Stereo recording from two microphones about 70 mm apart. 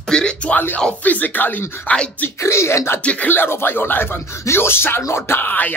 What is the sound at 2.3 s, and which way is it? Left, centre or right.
Speech, left.